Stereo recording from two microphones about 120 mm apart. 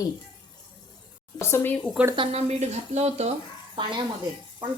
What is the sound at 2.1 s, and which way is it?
Speech, 55° right (ahead or behind).